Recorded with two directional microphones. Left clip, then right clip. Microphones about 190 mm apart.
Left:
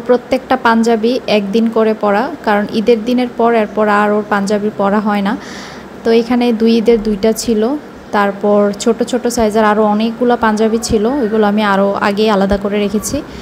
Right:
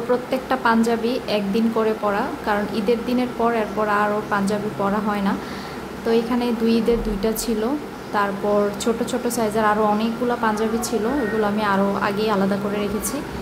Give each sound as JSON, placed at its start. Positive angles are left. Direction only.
{"t": 0.1, "sound": "speech", "side_deg": 30}